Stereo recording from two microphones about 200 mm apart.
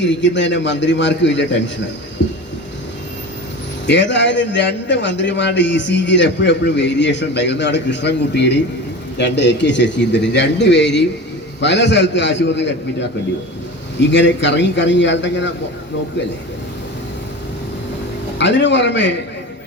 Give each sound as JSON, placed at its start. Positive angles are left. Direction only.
{"t": 0.0, "sound": "a man's voice", "side_deg": 65}
{"t": 3.8, "sound": "a man's voice", "side_deg": 60}
{"t": 14.1, "sound": "a man's voice", "side_deg": 60}
{"t": 18.3, "sound": "a man's voice", "side_deg": 65}